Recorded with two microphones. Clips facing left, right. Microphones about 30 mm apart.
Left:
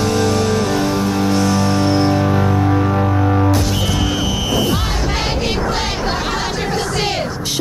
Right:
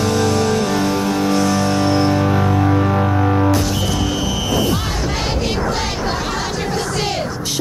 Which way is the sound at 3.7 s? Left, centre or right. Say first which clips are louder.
Left 1 dB; centre.